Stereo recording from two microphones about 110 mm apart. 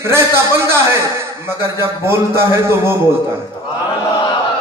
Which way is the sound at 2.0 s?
25° right (ahead or behind).